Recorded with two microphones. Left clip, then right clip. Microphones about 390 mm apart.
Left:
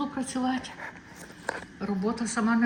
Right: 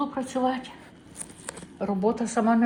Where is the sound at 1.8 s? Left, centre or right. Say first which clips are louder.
Right 6 dB; centre.